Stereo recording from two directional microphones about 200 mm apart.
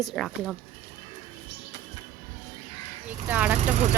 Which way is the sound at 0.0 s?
Centre (ahead or behind).